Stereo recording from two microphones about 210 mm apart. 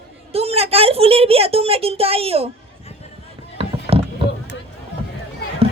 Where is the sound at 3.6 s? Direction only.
25° right (ahead or behind).